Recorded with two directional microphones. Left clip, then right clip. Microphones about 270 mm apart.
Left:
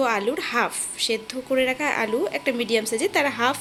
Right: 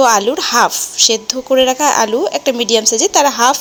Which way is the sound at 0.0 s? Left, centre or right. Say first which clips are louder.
Right 11 dB; centre.